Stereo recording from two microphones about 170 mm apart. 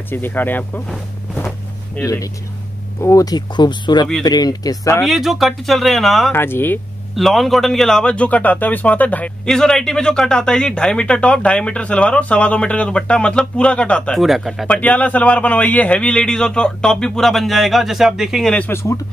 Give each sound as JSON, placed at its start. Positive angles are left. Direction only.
{"t": 0.1, "sound": "speech", "side_deg": 10}
{"t": 2.0, "sound": "speech", "side_deg": 20}
{"t": 5.0, "sound": "a man's voice", "side_deg": 0}
{"t": 6.3, "sound": "speech", "side_deg": 15}
{"t": 7.2, "sound": "a man's voice", "side_deg": 0}